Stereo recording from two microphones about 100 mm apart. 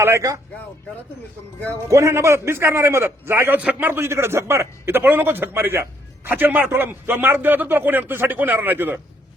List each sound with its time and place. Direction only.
0.0 s speech: 30° right (ahead or behind)
1.7 s a man's voice: 30° right (ahead or behind)